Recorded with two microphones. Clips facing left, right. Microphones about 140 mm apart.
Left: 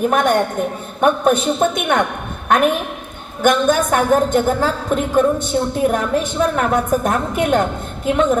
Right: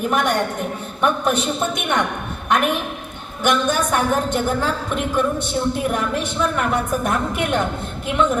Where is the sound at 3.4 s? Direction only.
45° left (ahead or behind).